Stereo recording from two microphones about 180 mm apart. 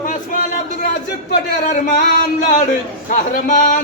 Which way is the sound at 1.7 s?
45° left (ahead or behind).